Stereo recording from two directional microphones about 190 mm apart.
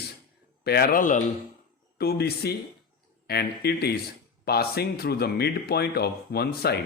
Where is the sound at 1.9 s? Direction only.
55° left (ahead or behind).